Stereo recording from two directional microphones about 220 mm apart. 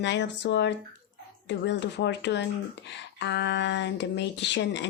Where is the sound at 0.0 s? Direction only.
50° left (ahead or behind).